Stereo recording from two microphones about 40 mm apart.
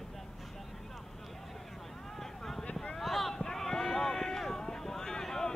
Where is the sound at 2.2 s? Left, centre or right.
Centre.